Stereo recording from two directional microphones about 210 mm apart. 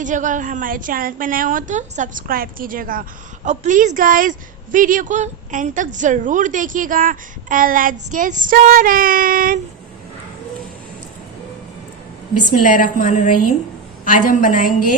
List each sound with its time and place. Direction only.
0.0 s a woman's voice: 35° right (ahead or behind)
12.6 s a woman's voice: 40° left (ahead or behind)